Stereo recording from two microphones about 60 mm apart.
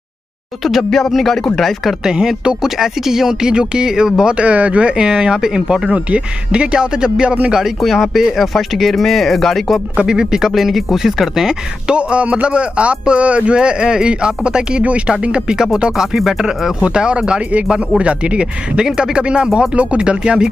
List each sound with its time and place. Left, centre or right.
0.8 s speech: centre
2.0 s speech: centre
7.8 s speech: centre
9.9 s speech: centre
11.9 s speech: centre